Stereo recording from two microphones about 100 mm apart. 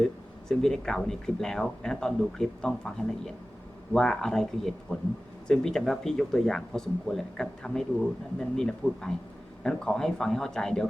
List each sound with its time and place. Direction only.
0.0 s speech: 5° left (ahead or behind)